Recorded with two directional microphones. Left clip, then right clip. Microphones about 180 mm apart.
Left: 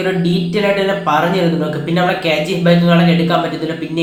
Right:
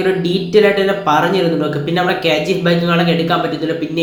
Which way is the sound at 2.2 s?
15° right (ahead or behind).